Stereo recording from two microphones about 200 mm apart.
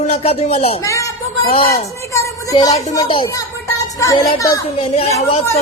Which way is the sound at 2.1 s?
15° left (ahead or behind).